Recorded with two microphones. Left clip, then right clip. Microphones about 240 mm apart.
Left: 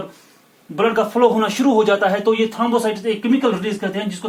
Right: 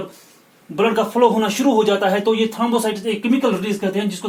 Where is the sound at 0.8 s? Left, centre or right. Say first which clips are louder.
Even; centre.